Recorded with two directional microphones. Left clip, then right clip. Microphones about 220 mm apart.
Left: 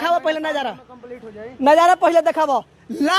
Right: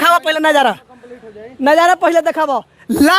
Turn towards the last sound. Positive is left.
turn(degrees=-35)  # may be behind; listen again after turning